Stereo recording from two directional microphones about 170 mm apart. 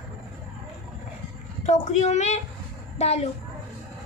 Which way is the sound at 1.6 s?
45° left (ahead or behind).